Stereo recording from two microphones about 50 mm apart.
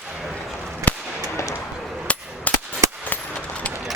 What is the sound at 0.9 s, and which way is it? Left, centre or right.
Firecracker, left.